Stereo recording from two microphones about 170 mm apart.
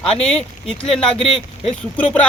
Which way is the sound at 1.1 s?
35° left (ahead or behind).